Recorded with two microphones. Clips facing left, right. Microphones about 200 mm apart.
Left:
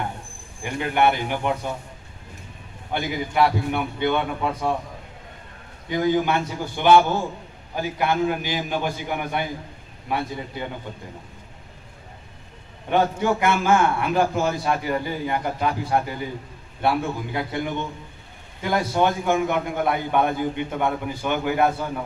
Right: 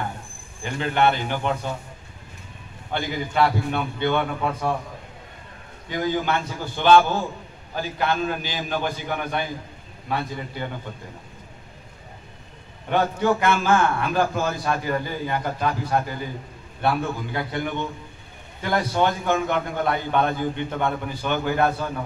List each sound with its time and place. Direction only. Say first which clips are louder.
0.7 s a man's voice: even; 15° left (ahead or behind)
2.9 s a man's voice: left 1 dB; 15° left (ahead or behind)
5.9 s a man's voice: left 3 dB; 20° left (ahead or behind)
12.9 s a man's voice: even; 15° left (ahead or behind)